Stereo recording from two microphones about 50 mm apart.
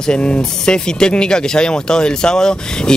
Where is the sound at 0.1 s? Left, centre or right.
Centre.